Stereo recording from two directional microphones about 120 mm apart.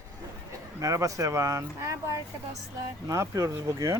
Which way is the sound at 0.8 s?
30° right (ahead or behind).